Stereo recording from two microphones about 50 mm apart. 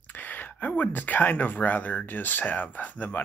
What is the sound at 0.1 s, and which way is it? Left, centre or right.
Speech, left.